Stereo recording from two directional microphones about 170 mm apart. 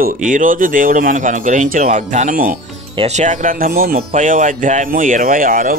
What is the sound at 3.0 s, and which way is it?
Speech, 40° right (ahead or behind).